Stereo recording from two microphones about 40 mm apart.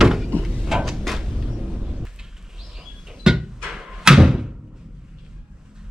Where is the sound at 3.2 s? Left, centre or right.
Centre.